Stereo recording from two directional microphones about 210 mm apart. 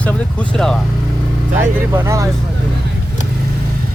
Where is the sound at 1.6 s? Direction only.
10° right (ahead or behind).